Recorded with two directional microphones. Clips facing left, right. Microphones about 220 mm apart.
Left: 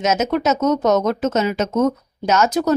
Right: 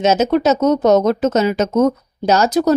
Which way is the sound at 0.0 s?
30° right (ahead or behind).